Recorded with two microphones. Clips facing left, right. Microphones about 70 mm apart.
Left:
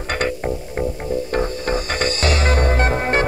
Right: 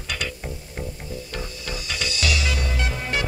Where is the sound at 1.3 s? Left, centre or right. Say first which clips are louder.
Left 12 dB; left.